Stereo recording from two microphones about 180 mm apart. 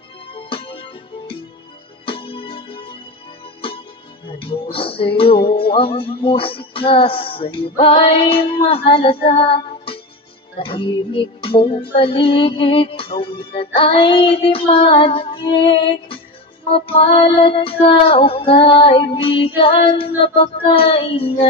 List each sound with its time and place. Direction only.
0.3 s music: 30° left (ahead or behind)
4.3 s music: 30° left (ahead or behind)
8.6 s child singing: 30° left (ahead or behind)